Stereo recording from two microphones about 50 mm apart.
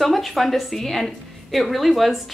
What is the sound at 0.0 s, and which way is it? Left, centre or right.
Speech, centre.